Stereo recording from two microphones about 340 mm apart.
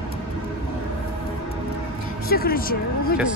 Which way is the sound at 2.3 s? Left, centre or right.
Left.